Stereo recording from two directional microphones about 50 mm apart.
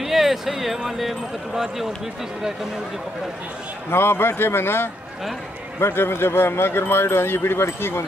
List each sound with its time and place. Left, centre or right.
0.0 s speech: centre
3.9 s speech: left